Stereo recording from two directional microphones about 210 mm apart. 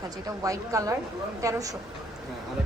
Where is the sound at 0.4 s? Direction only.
15° right (ahead or behind).